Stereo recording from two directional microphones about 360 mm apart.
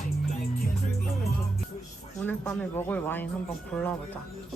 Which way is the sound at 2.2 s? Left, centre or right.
Centre.